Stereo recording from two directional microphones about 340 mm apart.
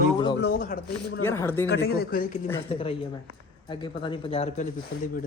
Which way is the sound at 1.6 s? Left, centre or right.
Left.